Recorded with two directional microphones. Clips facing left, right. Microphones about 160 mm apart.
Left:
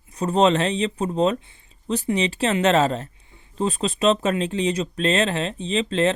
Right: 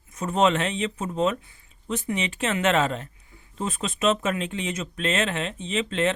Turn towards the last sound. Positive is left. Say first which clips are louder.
# left 4 dB
turn(degrees=35)  # may be behind; listen again after turning